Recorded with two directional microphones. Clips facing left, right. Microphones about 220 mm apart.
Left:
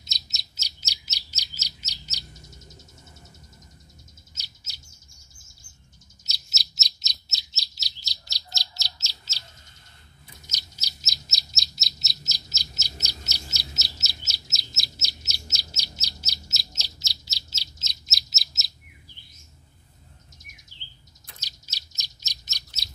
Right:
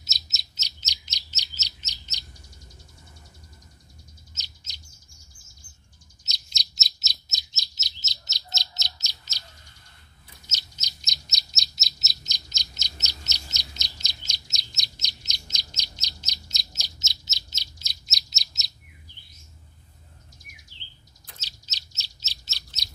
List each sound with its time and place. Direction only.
0.0 s bird: 5° right (ahead or behind)
0.6 s chirp: 10° left (ahead or behind)
6.2 s bird: 5° left (ahead or behind)
7.2 s chirp: 20° right (ahead or behind)
10.4 s bird: 10° left (ahead or behind)
16.7 s bird: 20° right (ahead or behind)
18.0 s bird: centre (ahead or behind)
20.7 s bird: 50° left (ahead or behind)
21.4 s bird: 10° left (ahead or behind)